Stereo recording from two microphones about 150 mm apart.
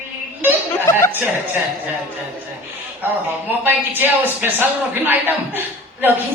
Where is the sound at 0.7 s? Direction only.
15° left (ahead or behind).